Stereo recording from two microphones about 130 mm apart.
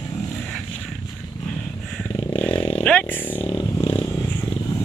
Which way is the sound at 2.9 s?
5° left (ahead or behind).